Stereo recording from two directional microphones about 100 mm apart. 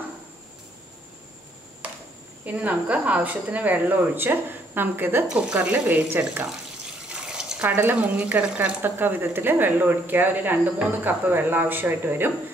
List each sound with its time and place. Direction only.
2.4 s a woman's voice: 15° right (ahead or behind)
5.3 s a woman's voice: 10° right (ahead or behind)
7.1 s water: 5° right (ahead or behind)
7.6 s speech: 20° right (ahead or behind)